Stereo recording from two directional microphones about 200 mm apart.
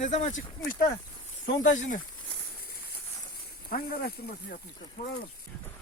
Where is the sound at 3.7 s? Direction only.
50° left (ahead or behind).